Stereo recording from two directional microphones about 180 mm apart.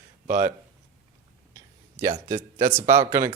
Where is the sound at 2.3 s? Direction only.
50° right (ahead or behind).